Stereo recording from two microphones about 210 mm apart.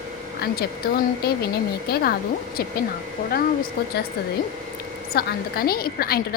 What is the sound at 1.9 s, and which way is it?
Speech, 50° left (ahead or behind).